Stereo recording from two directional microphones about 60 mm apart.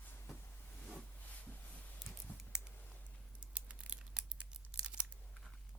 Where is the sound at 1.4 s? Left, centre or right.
Left.